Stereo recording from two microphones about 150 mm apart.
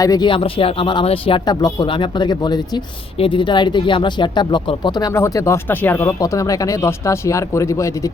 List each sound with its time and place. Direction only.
0.0 s speech: 25° left (ahead or behind)
1.5 s speech: 30° left (ahead or behind)